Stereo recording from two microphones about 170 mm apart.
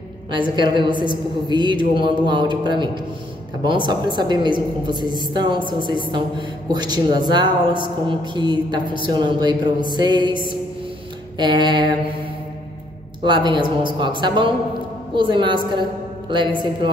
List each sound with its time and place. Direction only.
0.3 s a woman's voice: 25° right (ahead or behind)
11.3 s a woman's voice: 25° right (ahead or behind)
13.2 s a woman's voice: 25° right (ahead or behind)